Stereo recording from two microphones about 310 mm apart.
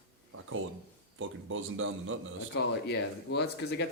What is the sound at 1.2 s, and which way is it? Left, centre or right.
Speech, right.